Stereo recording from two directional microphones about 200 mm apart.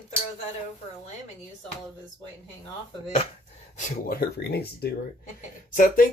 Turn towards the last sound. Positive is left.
turn(degrees=45)  # may be behind; listen again after turning